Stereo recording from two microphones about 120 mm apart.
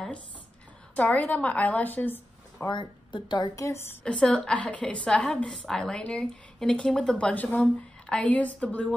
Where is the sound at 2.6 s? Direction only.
40° left (ahead or behind).